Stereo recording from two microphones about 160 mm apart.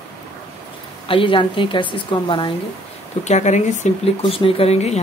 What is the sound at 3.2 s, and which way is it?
Speech, 45° left (ahead or behind).